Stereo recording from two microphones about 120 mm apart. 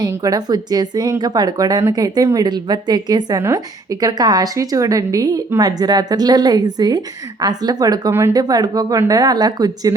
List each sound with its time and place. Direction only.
0.1 s a woman's voice: 30° right (ahead or behind)